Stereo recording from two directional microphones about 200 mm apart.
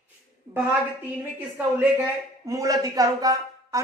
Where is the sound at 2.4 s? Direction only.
15° right (ahead or behind).